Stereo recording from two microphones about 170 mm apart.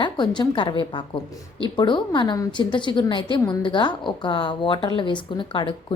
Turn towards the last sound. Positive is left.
turn(degrees=30)  # may be behind; listen again after turning